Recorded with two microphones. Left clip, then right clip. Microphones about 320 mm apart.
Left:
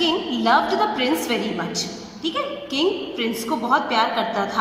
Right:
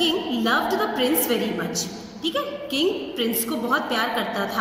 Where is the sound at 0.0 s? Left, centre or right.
Left.